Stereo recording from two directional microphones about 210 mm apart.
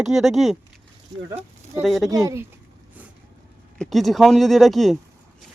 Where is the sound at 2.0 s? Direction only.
15° right (ahead or behind).